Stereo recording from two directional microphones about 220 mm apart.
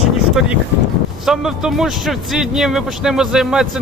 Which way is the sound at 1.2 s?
Centre (ahead or behind).